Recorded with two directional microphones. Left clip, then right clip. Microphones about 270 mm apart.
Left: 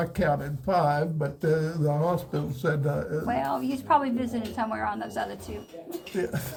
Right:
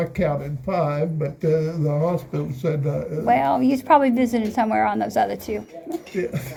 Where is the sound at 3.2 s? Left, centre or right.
Right.